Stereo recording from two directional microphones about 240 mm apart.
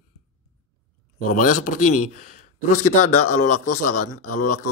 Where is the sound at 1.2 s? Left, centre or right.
Left.